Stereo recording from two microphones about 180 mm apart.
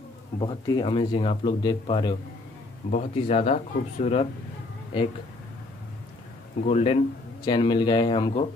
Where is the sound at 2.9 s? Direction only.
35° left (ahead or behind).